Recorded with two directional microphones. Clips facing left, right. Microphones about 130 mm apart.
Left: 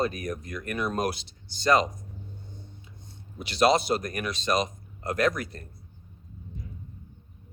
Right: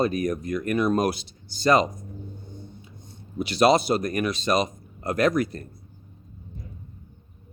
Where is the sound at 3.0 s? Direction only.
10° right (ahead or behind).